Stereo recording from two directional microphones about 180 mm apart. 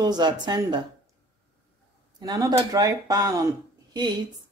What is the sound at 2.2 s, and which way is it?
Speech, 20° right (ahead or behind).